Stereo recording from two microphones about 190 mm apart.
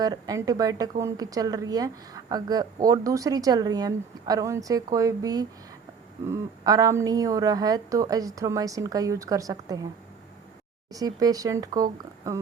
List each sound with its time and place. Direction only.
0.0 s a woman's voice: 20° right (ahead or behind)
10.9 s a woman's voice: 20° right (ahead or behind)